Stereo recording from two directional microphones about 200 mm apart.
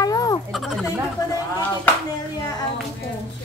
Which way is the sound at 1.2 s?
15° left (ahead or behind).